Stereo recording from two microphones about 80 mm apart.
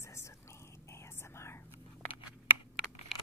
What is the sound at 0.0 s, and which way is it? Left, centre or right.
Whispering, left.